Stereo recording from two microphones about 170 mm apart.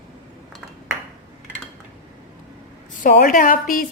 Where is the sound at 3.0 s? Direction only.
60° left (ahead or behind).